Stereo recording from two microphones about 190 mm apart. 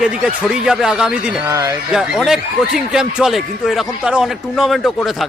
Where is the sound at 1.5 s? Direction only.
15° right (ahead or behind).